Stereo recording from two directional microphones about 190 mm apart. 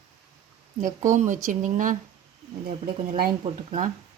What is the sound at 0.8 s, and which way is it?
Speech, 40° right (ahead or behind).